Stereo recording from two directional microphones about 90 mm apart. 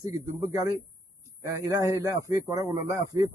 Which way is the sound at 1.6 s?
40° right (ahead or behind).